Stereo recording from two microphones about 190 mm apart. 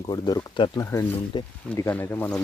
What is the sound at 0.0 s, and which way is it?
Speech, 20° left (ahead or behind).